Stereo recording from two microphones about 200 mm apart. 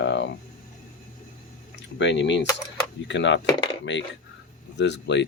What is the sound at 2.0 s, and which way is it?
Speech, 60° left (ahead or behind).